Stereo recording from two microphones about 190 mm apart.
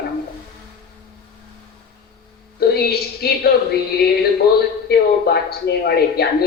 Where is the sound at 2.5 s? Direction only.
55° left (ahead or behind).